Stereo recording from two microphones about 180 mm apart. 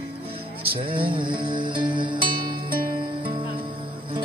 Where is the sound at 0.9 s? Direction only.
30° right (ahead or behind).